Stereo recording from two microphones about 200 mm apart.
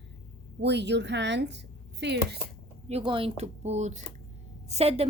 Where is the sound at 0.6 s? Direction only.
60° right (ahead or behind).